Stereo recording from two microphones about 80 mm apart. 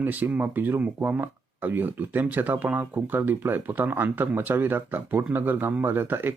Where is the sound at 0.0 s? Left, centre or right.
Right.